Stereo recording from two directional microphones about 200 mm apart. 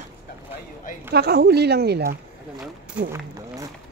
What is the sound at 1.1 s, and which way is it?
Speech, 50° right (ahead or behind).